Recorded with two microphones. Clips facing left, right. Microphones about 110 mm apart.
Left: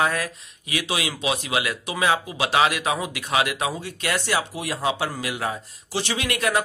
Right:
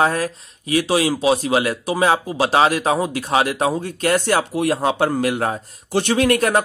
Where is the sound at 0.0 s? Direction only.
35° right (ahead or behind).